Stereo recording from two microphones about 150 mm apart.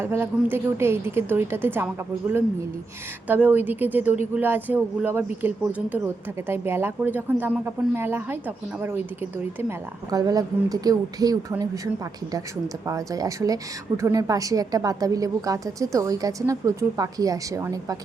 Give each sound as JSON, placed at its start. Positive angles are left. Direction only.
{"t": 0.0, "sound": "a woman's voice", "side_deg": -15}
{"t": 3.2, "sound": "a woman's voice", "side_deg": -10}
{"t": 10.1, "sound": "a woman's voice", "side_deg": -25}
{"t": 12.8, "sound": "a woman's voice", "side_deg": -20}